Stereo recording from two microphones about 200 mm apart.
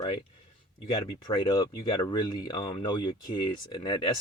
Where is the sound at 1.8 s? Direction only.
25° left (ahead or behind).